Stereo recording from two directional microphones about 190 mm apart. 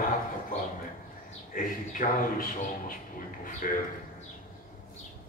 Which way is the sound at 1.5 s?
45° left (ahead or behind).